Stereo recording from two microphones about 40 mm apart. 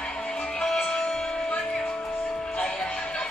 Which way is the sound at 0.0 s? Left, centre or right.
Left.